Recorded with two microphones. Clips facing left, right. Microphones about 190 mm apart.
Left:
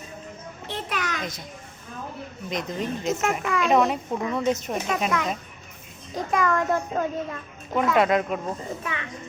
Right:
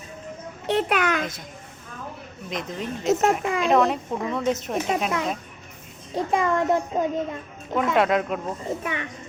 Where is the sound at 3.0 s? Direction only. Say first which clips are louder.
Right 7 dB; 40° right (ahead or behind).